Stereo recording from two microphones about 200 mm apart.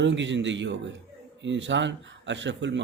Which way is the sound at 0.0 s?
65° right (ahead or behind).